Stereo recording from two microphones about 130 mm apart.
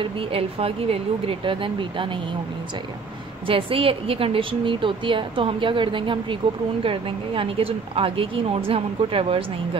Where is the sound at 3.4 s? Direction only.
45° right (ahead or behind).